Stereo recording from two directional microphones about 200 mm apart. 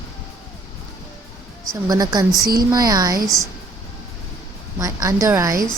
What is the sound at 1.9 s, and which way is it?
Speech, 20° right (ahead or behind).